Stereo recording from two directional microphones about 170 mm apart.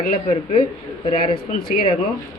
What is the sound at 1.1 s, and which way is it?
Speech, 35° left (ahead or behind).